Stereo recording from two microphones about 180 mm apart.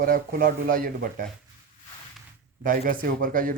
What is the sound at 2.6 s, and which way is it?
Speech, 50° right (ahead or behind).